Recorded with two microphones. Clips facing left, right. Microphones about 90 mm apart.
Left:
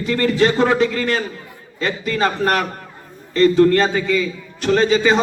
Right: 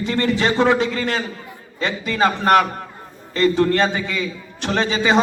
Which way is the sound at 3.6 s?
30° right (ahead or behind).